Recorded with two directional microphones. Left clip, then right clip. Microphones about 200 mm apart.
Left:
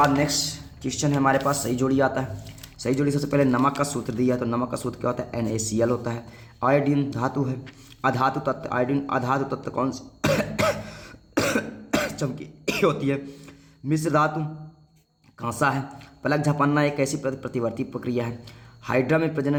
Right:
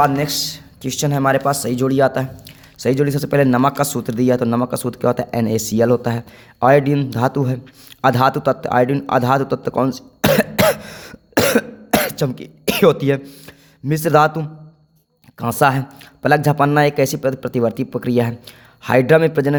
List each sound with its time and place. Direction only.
0.0 s a man's voice: 50° right (ahead or behind)